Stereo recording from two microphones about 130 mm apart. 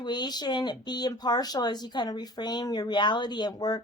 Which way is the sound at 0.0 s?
35° left (ahead or behind).